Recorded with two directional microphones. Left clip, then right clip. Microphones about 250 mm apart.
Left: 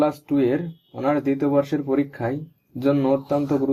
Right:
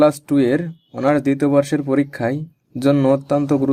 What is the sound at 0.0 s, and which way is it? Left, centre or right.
Speech, right.